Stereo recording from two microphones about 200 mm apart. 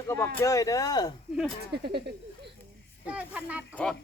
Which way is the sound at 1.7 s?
55° right (ahead or behind).